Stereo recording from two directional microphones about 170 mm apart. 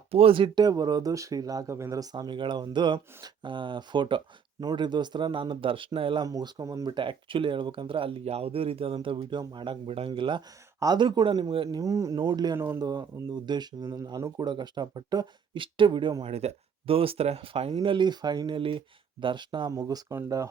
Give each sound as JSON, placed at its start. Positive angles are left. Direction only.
{"t": 0.1, "sound": "speech", "side_deg": -35}
{"t": 12.5, "sound": "speech", "side_deg": -15}